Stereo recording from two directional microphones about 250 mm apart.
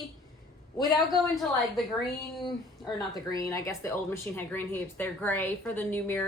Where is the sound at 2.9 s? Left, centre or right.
Centre.